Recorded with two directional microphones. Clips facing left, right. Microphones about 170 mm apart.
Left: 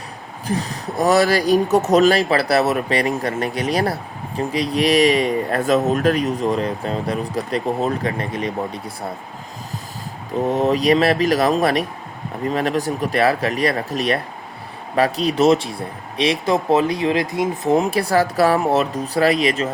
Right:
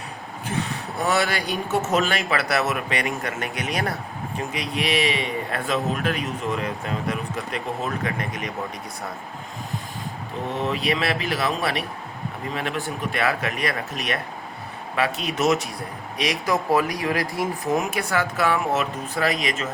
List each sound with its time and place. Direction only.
0.4 s speech: 35° left (ahead or behind)
10.4 s speech: 40° left (ahead or behind)